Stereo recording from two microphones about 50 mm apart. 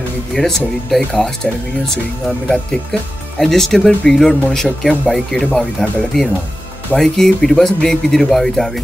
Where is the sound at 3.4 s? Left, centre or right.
Centre.